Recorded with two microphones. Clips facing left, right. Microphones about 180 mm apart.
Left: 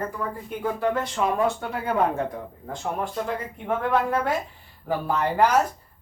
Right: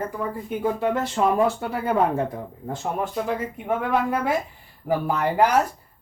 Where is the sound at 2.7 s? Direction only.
5° right (ahead or behind).